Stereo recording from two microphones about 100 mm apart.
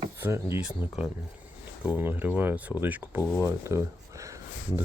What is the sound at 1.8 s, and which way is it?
Speech, 20° right (ahead or behind).